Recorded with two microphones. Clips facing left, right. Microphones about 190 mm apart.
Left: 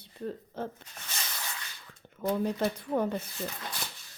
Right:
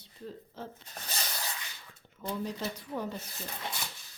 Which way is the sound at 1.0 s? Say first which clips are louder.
Right 2 dB; 35° right (ahead or behind).